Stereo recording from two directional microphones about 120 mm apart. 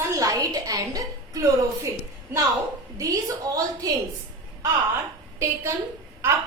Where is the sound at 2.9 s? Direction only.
30° right (ahead or behind).